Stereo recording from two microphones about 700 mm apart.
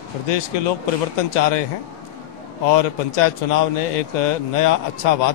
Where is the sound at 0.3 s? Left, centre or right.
Left.